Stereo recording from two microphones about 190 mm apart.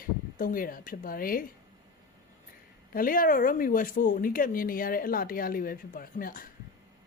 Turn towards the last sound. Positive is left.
turn(degrees=45)  # may be behind; listen again after turning